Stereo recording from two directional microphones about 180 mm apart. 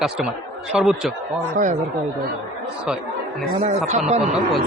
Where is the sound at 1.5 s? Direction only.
45° right (ahead or behind).